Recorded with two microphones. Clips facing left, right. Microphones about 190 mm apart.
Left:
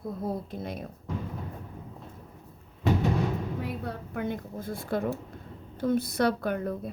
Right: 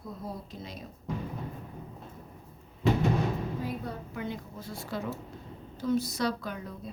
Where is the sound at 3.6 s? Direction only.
60° left (ahead or behind).